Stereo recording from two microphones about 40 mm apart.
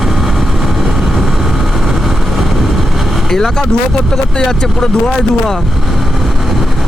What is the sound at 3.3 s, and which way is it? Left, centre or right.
Speech, centre.